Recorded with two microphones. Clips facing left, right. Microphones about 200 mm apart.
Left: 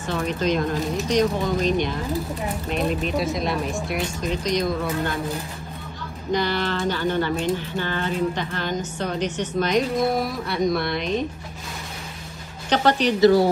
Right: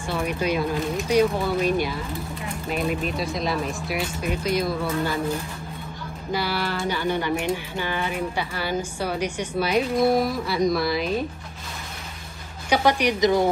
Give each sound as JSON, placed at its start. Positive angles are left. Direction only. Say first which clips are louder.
{"t": 0.1, "sound": "speech", "louder": "left 2 dB", "side_deg": -10}
{"t": 6.3, "sound": "speech", "louder": "left 3 dB", "side_deg": -10}
{"t": 12.6, "sound": "speech", "louder": "left 1 dB", "side_deg": -10}